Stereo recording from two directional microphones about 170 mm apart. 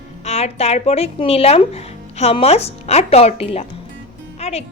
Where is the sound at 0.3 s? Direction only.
40° left (ahead or behind).